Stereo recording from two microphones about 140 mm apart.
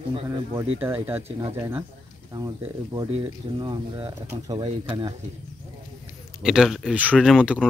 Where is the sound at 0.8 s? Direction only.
15° right (ahead or behind).